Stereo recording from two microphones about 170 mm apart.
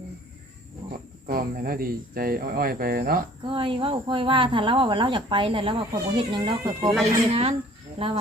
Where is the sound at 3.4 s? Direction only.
30° right (ahead or behind).